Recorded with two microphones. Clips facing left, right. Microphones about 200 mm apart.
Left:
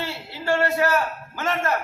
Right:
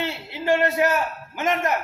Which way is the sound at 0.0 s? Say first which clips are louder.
Right 3 dB; 20° right (ahead or behind).